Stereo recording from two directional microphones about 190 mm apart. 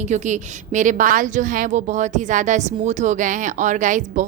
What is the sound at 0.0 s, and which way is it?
A woman's voice, 40° right (ahead or behind).